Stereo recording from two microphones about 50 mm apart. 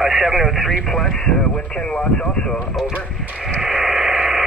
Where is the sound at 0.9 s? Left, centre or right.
Centre.